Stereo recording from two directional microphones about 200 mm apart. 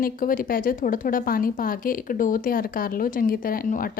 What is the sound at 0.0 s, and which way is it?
A woman's voice, 45° left (ahead or behind).